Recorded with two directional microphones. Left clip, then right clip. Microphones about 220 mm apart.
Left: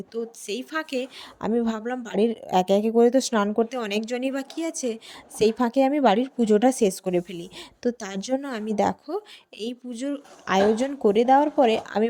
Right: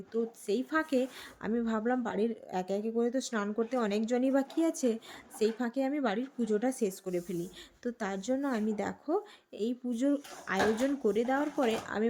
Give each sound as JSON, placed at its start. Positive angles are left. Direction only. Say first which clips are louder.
{"t": 0.1, "sound": "a woman's voice", "louder": "left 1 dB", "side_deg": 30}